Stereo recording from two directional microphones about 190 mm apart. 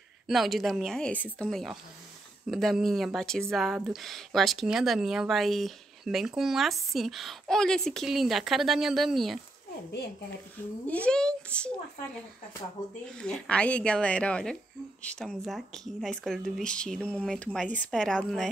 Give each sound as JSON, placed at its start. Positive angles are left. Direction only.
{"t": 0.3, "sound": "speech", "side_deg": 0}
{"t": 10.9, "sound": "speech", "side_deg": 5}
{"t": 12.8, "sound": "speech", "side_deg": 40}
{"t": 13.1, "sound": "speech", "side_deg": 5}